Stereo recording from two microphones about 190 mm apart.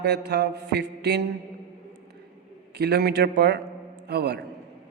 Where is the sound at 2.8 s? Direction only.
60° right (ahead or behind).